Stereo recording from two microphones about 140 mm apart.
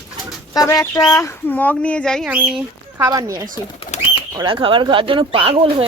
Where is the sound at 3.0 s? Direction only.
20° right (ahead or behind).